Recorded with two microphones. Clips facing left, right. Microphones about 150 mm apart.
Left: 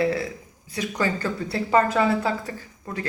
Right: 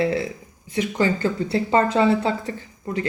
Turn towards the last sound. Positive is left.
turn(degrees=-20)  # may be behind; listen again after turning